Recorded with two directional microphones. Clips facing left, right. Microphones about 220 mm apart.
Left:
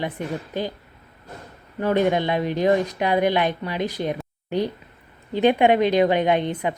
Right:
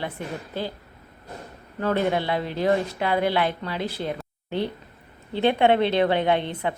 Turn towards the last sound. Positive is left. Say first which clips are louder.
# left 2 dB
turn(degrees=15)  # may be behind; listen again after turning